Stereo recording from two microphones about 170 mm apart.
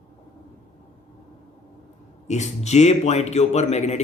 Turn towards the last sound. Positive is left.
turn(degrees=40)  # may be behind; listen again after turning